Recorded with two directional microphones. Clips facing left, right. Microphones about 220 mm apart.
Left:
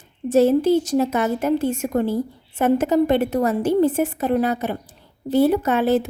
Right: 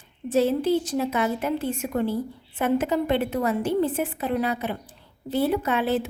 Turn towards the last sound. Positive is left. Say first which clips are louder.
# left 5 dB
turn(degrees=45)  # may be behind; listen again after turning